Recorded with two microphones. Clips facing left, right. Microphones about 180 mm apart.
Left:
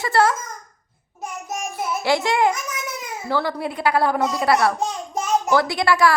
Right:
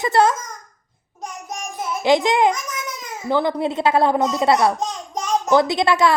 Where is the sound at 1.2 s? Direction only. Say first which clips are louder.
Left 2 dB; 5° left (ahead or behind).